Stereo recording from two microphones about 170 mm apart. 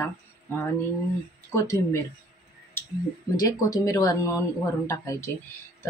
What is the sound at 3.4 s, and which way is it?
Speech, 20° left (ahead or behind).